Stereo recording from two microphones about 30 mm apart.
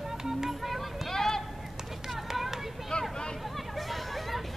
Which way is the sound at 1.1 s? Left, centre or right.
Centre.